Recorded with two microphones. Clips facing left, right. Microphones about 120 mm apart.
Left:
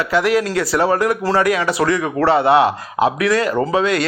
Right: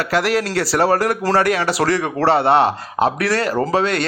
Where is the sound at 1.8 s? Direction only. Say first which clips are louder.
Left 1 dB; 45° right (ahead or behind).